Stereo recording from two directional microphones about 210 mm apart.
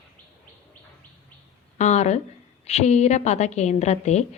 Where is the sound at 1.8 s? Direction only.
35° left (ahead or behind).